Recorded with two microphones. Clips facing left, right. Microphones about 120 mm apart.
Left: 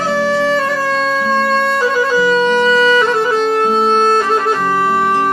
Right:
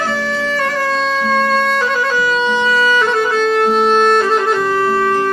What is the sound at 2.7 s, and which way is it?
Music, 20° left (ahead or behind).